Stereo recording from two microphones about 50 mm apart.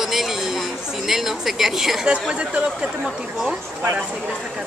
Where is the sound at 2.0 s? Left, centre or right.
Centre.